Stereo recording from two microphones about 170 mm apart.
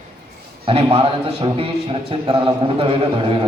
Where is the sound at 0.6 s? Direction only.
35° right (ahead or behind).